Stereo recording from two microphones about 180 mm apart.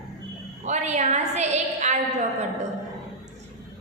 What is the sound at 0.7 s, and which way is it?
A woman's voice, 40° right (ahead or behind).